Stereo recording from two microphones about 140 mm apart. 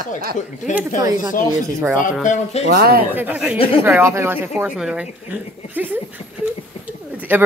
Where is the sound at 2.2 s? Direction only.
60° left (ahead or behind).